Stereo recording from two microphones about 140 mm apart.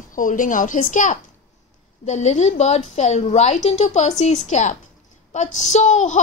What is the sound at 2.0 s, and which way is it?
A woman's voice, 55° left (ahead or behind).